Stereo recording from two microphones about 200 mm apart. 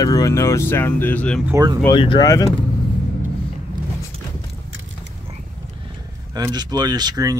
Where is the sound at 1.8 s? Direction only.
25° left (ahead or behind).